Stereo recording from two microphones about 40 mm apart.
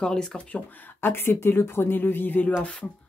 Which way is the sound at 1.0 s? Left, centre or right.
Left.